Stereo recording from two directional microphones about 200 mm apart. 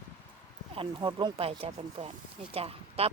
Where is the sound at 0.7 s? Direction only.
25° right (ahead or behind).